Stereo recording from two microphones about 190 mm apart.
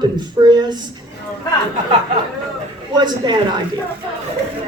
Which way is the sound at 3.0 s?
20° right (ahead or behind).